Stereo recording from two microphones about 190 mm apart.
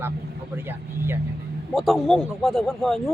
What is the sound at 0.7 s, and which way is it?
Speech, 10° right (ahead or behind).